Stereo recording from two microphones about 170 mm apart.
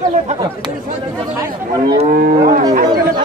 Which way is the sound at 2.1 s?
55° right (ahead or behind).